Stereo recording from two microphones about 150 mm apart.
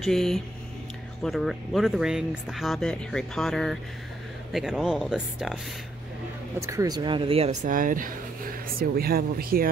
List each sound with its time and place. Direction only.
0.0 s speech: centre (ahead or behind)
6.6 s speech: 20° right (ahead or behind); by 7.5 s 40° right (ahead or behind)
7.6 s speech: 65° right (ahead or behind)